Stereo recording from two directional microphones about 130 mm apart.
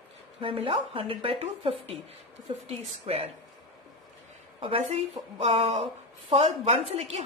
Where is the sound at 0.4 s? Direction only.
45° right (ahead or behind).